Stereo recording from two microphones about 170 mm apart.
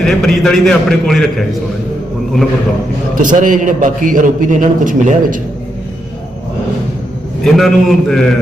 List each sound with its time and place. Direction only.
0.0 s a man's voice: 5° left (ahead or behind)
3.2 s a man's voice: 50° right (ahead or behind)
7.4 s a man's voice: centre (ahead or behind)